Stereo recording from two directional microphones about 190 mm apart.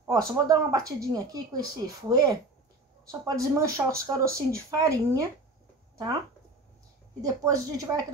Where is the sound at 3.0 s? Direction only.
20° right (ahead or behind).